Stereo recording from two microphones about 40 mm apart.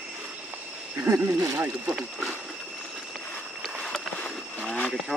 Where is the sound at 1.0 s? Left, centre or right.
Right.